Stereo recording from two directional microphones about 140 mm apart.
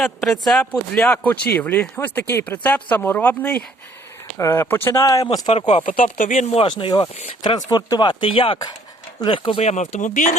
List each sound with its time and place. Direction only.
0.0 s speech: centre (ahead or behind); by 5.4 s 25° left (ahead or behind)
5.5 s speech: 50° left (ahead or behind)
6.0 s speech: 70° left (ahead or behind)
6.5 s speech: 40° left (ahead or behind)
9.6 s speech: 55° left (ahead or behind)